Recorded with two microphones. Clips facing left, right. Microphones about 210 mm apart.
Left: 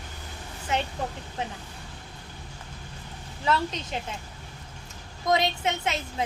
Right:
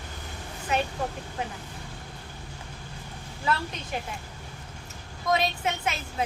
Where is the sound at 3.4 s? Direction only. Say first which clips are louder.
Left 3 dB; 20° left (ahead or behind).